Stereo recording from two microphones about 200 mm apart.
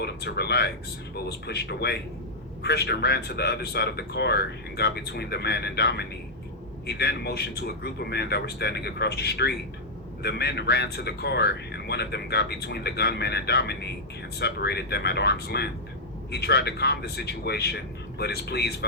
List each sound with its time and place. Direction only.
0.0 s speech: 55° left (ahead or behind)